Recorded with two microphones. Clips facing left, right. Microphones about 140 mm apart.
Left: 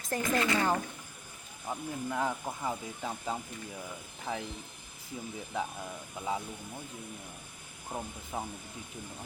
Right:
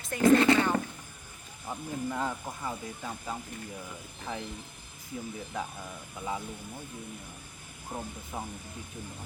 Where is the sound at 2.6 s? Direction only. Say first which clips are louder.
Left 1 dB; 15° left (ahead or behind).